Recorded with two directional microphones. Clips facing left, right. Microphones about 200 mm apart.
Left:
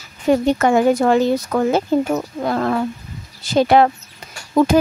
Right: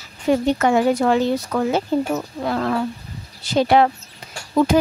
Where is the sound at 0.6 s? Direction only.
45° left (ahead or behind).